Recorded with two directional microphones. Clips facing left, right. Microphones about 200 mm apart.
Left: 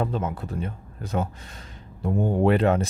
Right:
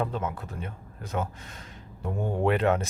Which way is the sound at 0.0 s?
35° left (ahead or behind).